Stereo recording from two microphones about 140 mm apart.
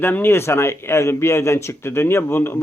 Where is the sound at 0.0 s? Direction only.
15° left (ahead or behind).